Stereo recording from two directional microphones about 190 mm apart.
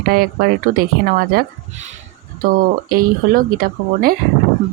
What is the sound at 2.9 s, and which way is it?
Speech, 50° right (ahead or behind).